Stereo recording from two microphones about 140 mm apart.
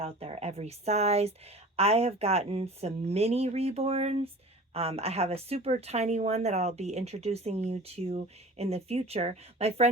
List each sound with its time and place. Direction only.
0.0 s speech: 45° right (ahead or behind)